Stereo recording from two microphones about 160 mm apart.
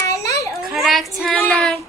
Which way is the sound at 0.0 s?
20° left (ahead or behind).